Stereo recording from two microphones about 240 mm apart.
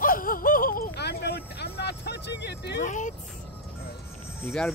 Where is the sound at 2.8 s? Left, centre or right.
Left.